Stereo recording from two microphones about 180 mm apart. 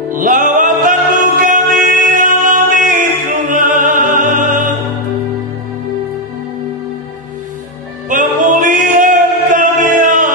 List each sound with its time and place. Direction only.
0.1 s music: 45° right (ahead or behind)
8.1 s music: 45° right (ahead or behind)